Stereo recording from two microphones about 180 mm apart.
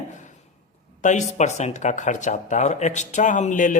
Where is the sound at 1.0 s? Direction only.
40° left (ahead or behind).